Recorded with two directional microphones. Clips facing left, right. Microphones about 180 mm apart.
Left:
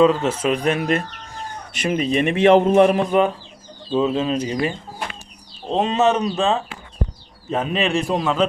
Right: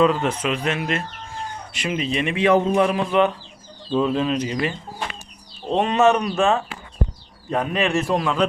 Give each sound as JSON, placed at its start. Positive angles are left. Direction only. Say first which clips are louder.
{"t": 0.0, "sound": "a man's voice", "louder": "left 3 dB", "side_deg": 30}
{"t": 3.9, "sound": "speech", "louder": "left 1 dB", "side_deg": 25}
{"t": 5.7, "sound": "speech", "louder": "right 1 dB", "side_deg": 20}
{"t": 8.1, "sound": "a man's voice", "louder": "left 2 dB", "side_deg": 0}